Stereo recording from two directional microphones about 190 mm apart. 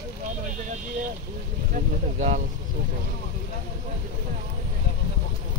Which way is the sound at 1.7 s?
40° right (ahead or behind).